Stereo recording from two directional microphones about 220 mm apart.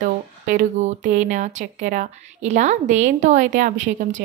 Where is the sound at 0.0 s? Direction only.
35° right (ahead or behind).